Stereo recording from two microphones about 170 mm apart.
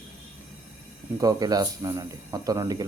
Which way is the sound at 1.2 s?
20° right (ahead or behind).